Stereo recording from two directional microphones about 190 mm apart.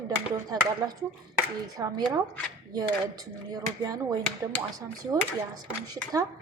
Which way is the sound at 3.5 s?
20° right (ahead or behind).